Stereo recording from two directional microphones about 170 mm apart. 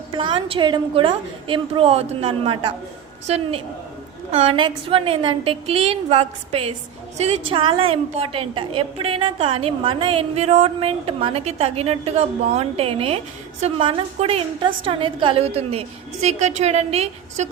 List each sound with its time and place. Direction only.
0.1 s a woman's voice: 30° right (ahead or behind)